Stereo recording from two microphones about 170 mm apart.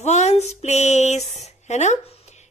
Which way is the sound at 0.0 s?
40° left (ahead or behind).